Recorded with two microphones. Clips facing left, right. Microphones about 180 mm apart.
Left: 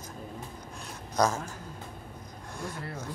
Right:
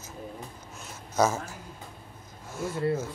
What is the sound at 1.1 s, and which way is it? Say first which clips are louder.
Speech: right 2 dB; 5° right (ahead or behind).